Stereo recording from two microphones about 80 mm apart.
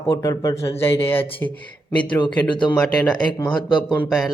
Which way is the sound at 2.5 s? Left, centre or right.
Left.